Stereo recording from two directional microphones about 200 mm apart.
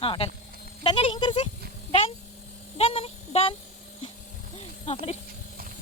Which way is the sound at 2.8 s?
30° left (ahead or behind).